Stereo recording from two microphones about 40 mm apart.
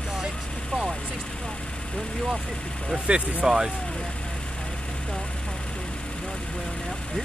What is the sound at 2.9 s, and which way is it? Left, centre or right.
Speech, right.